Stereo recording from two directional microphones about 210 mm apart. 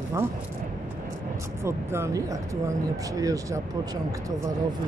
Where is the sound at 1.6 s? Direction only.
10° right (ahead or behind).